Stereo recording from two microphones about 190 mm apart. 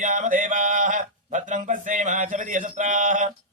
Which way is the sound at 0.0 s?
45° right (ahead or behind).